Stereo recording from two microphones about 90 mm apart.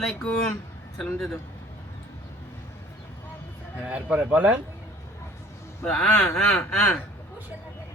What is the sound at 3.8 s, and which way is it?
Speech, 15° right (ahead or behind).